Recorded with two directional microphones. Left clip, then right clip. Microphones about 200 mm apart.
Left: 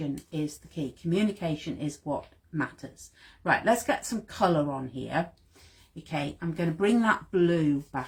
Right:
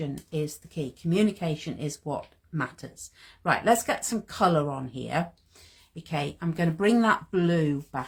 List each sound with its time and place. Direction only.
0.0 s speech: 45° right (ahead or behind)
3.4 s speech: 45° right (ahead or behind)